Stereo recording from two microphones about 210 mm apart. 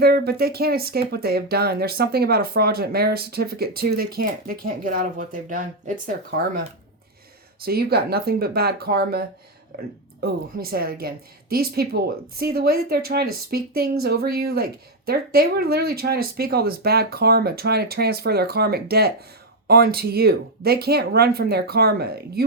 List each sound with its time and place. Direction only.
0.0 s speech: 50° right (ahead or behind)
7.6 s speech: 45° right (ahead or behind)